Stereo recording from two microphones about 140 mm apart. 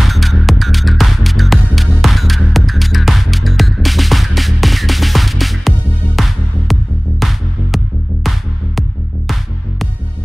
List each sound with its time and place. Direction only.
0.0 s music: centre (ahead or behind)